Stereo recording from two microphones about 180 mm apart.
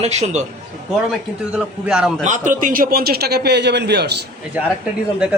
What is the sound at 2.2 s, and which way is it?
A man's voice, 45° right (ahead or behind).